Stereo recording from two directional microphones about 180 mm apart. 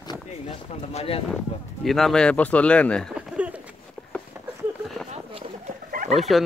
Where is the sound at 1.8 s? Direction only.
Centre (ahead or behind).